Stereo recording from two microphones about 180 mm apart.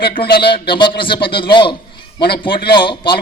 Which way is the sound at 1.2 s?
30° left (ahead or behind).